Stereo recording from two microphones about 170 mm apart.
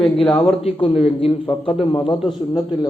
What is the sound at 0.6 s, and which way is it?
A man's voice, 35° left (ahead or behind).